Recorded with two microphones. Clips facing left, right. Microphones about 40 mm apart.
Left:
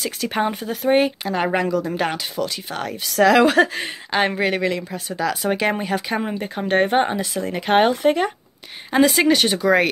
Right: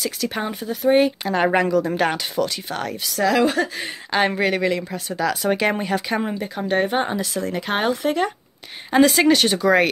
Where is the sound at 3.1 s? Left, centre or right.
Left.